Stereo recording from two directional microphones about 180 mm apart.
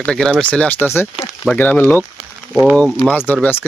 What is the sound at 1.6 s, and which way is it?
Speech, 10° left (ahead or behind).